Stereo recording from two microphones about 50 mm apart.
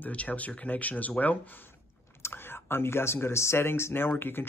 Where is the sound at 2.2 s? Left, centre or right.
Left.